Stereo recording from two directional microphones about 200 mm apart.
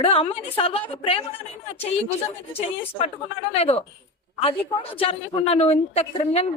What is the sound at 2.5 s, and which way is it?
A woman's voice, 30° left (ahead or behind).